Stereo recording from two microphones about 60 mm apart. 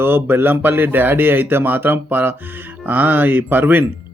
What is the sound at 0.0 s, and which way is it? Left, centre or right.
Speech, right.